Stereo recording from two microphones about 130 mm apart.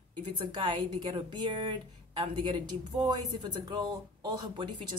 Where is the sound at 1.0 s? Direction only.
40° right (ahead or behind).